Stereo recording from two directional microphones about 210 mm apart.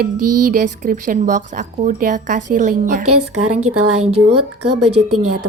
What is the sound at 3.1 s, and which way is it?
Speech, 90° right.